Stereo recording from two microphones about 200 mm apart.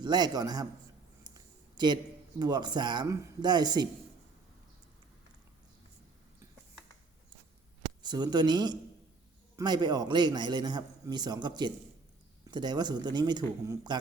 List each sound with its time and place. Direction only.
0.0 s a man's voice: 20° right (ahead or behind)
1.2 s a sound: 20° right (ahead or behind)
2.4 s a man's voice: 20° right (ahead or behind)
8.0 s a man's voice: 20° right (ahead or behind)